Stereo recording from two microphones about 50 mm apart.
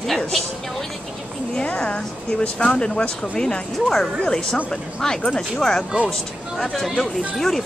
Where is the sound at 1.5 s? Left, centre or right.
Left.